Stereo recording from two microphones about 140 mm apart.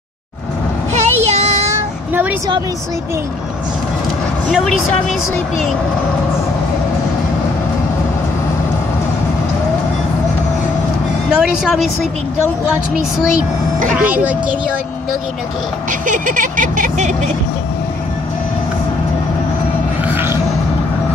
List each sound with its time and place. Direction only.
0.9 s child singing: 50° right (ahead or behind)
4.5 s a woman's voice: 5° right (ahead or behind)
11.3 s a woman's voice: centre (ahead or behind)
13.2 s a woman's voice: 5° right (ahead or behind)
16.1 s a sound: 70° right (ahead or behind)
20.1 s a sound: 15° right (ahead or behind)